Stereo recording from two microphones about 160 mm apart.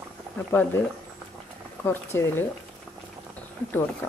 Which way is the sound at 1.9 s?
15° left (ahead or behind).